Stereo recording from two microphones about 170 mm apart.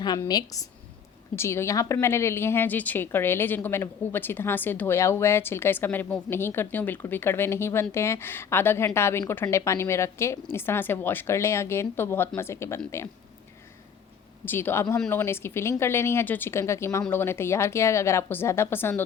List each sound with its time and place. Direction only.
0.0 s a woman's voice: 25° left (ahead or behind)
14.4 s speech: 10° left (ahead or behind)